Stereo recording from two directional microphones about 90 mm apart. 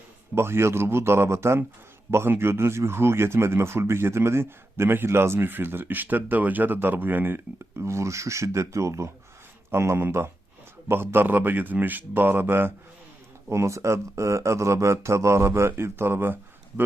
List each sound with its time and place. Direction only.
0.3 s speech: 30° right (ahead or behind)